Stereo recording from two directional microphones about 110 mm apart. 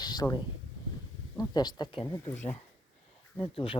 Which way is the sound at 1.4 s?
40° left (ahead or behind).